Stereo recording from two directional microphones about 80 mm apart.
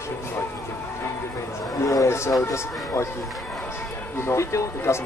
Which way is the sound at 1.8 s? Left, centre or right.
Left.